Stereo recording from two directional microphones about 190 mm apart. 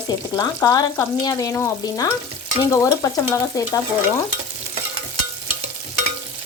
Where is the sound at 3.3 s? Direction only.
15° left (ahead or behind).